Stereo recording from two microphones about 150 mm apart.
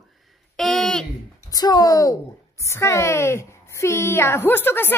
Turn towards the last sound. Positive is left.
turn(degrees=15)  # may be behind; listen again after turning